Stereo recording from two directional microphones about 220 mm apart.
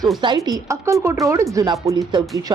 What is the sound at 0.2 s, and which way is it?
A woman's voice, 20° right (ahead or behind).